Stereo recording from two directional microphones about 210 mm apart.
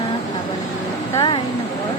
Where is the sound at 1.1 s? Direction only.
20° left (ahead or behind).